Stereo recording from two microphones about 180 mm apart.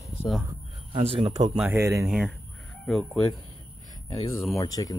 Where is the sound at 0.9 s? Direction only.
35° right (ahead or behind).